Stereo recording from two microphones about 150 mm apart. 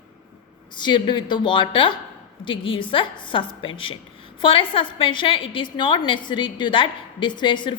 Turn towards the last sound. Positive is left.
turn(degrees=30)  # may be behind; listen again after turning